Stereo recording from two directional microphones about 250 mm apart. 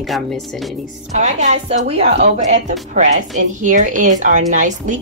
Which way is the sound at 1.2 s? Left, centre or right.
Right.